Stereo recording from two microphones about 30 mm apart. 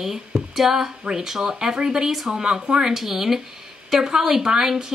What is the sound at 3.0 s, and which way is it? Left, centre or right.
Speech, centre.